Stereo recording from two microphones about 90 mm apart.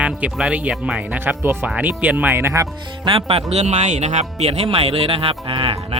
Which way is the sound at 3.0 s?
85° right.